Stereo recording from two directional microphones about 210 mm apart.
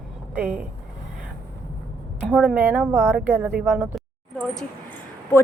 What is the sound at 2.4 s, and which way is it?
Speech, 5° right (ahead or behind).